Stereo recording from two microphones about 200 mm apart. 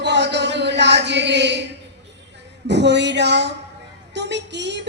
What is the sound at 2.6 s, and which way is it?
A woman's voice, 60° right (ahead or behind).